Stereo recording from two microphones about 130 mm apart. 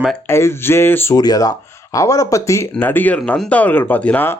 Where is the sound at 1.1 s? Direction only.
30° left (ahead or behind).